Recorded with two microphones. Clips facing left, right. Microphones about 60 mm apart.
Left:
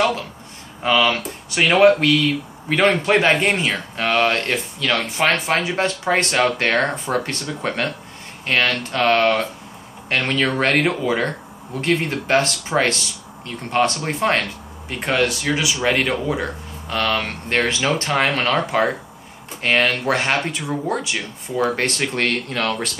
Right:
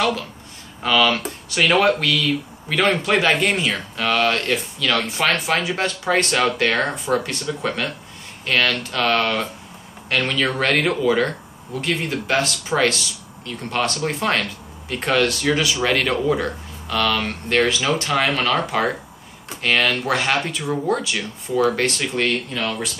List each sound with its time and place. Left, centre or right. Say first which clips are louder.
0.8 s speech: even; left
8.5 s speech: even; left
11.8 s speech: left 3 dB; left; by 16.4 s centre
16.9 s speech: even; left